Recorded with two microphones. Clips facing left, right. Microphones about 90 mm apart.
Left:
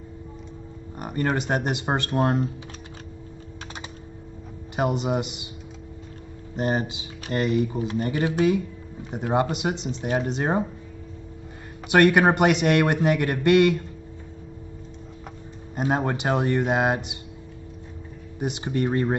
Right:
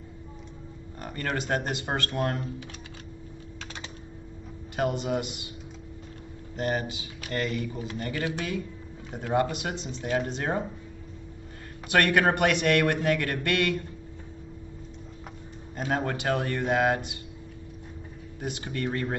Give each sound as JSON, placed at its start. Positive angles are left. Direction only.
{"t": 0.9, "sound": "speech", "side_deg": 20}
{"t": 4.7, "sound": "speech", "side_deg": 20}
{"t": 6.5, "sound": "speech", "side_deg": 25}
{"t": 11.9, "sound": "speech", "side_deg": 20}
{"t": 15.7, "sound": "speech", "side_deg": 20}
{"t": 18.4, "sound": "speech", "side_deg": 20}